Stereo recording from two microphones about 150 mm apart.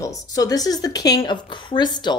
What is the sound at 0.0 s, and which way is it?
Speech, 25° left (ahead or behind).